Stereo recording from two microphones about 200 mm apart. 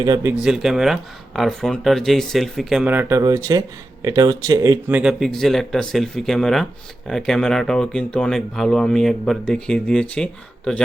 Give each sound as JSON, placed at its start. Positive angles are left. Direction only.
{"t": 0.0, "sound": "speech", "side_deg": -15}
{"t": 0.4, "sound": "speech", "side_deg": -5}